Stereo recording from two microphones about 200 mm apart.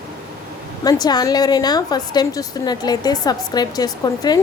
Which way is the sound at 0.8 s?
20° left (ahead or behind).